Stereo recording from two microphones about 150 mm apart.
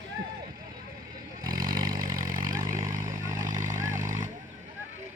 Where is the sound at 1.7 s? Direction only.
30° right (ahead or behind).